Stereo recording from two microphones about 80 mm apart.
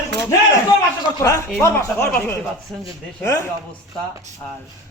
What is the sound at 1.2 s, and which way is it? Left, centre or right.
Speech, left.